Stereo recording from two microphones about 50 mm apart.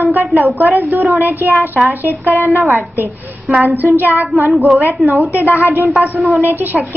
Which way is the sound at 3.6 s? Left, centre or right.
Right.